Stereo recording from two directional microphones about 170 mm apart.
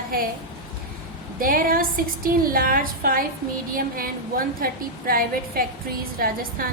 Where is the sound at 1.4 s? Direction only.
55° right (ahead or behind).